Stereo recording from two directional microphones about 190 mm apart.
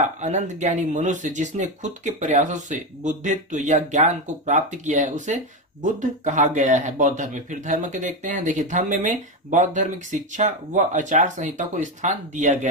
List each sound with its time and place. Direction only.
0.2 s speech: 40° right (ahead or behind)